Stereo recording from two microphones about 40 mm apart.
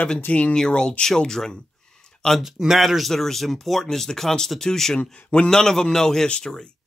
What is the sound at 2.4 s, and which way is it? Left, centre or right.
Speech, centre.